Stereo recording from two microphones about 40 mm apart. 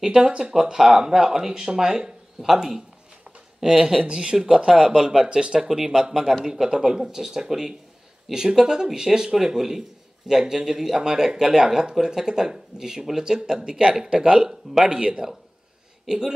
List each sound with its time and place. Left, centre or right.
0.0 s speech: centre
4.0 s speech: right
5.6 s speech: centre